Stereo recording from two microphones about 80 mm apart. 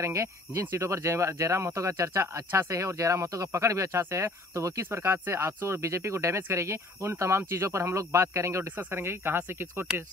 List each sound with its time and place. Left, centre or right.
0.0 s speech: right